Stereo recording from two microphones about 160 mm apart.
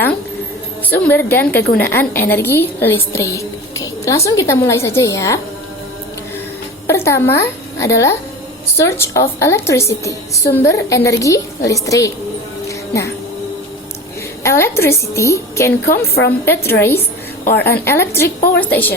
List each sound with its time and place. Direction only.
0.9 s a woman's voice: 10° left (ahead or behind)
1.5 s a woman's voice: 80° left
1.9 s a woman's voice: 15° left (ahead or behind)
6.8 s a woman's voice: 15° left (ahead or behind)
12.6 s music: 20° left (ahead or behind)
14.4 s a woman's voice: 15° left (ahead or behind)
17.4 s a woman's voice: 80° left
17.7 s a woman's voice: 15° left (ahead or behind)